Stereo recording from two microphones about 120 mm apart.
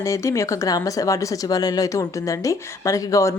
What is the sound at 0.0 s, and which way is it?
Speech, 25° left (ahead or behind).